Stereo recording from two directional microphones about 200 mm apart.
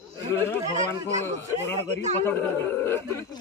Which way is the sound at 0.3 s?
10° left (ahead or behind).